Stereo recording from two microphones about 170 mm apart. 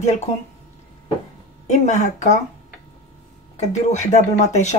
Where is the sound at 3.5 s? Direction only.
40° left (ahead or behind).